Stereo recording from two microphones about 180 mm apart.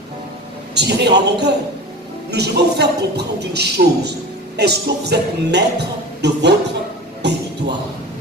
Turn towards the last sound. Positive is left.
turn(degrees=-70)  # may be behind; listen again after turning